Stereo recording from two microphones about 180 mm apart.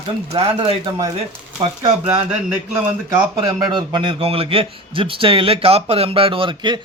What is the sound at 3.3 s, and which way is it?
A man's voice, 25° right (ahead or behind).